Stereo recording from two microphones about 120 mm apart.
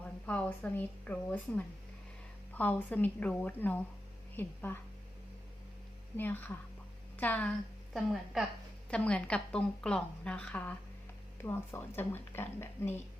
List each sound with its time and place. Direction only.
0.0 s a woman's voice: 10° left (ahead or behind)
6.1 s a woman's voice: 15° left (ahead or behind)
7.9 s a woman's voice: centre (ahead or behind)
8.9 s a woman's voice: 10° left (ahead or behind)